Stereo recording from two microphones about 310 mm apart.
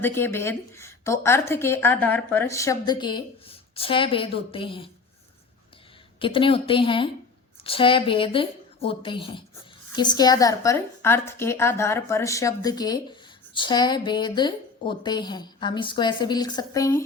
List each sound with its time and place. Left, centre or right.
0.0 s a woman's voice: centre
6.1 s a woman's voice: centre